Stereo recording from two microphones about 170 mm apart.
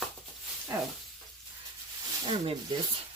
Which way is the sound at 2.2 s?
35° right (ahead or behind).